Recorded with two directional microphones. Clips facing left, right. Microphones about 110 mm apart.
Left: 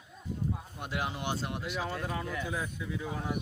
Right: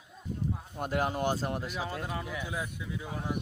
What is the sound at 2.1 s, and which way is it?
Speech, 10° right (ahead or behind).